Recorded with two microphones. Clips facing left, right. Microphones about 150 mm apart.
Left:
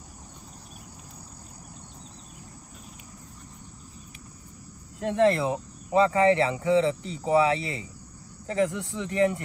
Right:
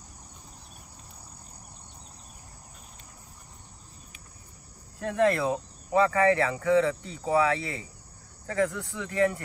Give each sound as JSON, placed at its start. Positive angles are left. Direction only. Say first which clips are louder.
{"t": 5.0, "sound": "speech", "louder": "left 2 dB", "side_deg": 25}